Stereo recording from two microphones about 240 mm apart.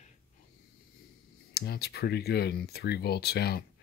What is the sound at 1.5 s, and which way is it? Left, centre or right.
Speech, left.